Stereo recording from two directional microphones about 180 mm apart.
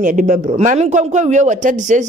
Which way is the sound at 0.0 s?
45° right (ahead or behind).